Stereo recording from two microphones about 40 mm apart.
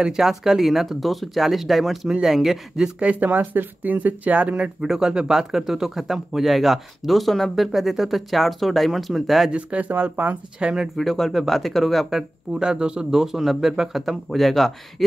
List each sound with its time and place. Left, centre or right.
0.0 s speech: centre
3.0 s speech: right
4.8 s speech: centre
9.5 s speech: right
11.0 s speech: centre
12.5 s speech: right
13.2 s speech: centre